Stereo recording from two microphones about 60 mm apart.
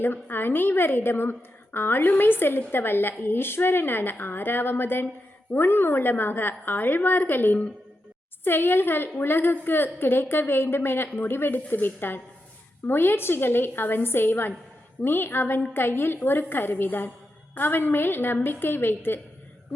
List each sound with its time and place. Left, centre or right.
0.0 s a woman's voice: left